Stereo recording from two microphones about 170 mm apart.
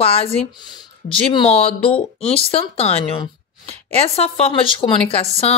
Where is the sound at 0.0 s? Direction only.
35° left (ahead or behind).